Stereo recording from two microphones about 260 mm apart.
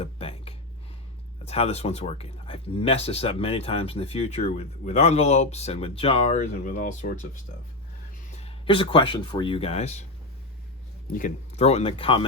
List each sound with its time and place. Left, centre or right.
0.0 s a sound: left
1.5 s speech: left
8.4 s speech: left
11.1 s speech: left